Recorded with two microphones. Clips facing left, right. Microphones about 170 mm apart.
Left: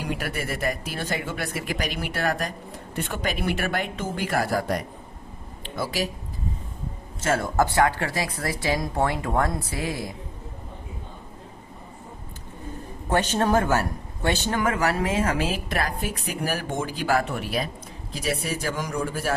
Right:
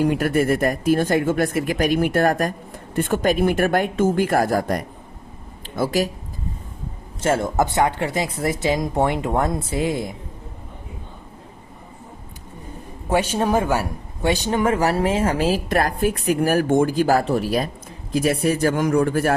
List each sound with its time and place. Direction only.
0.0 s speech: 45° right (ahead or behind)
7.2 s speech: 25° right (ahead or behind)
13.1 s speech: 10° right (ahead or behind)
14.6 s speech: 30° right (ahead or behind)
15.8 s speech: 55° right (ahead or behind)
18.1 s speech: 50° right (ahead or behind)